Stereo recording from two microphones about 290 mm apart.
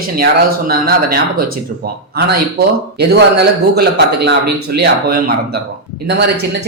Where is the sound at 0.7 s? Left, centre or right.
Right.